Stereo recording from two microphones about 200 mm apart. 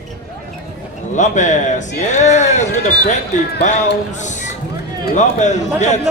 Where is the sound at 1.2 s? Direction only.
35° left (ahead or behind).